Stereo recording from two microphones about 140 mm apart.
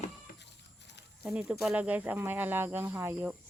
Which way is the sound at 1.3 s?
5° right (ahead or behind).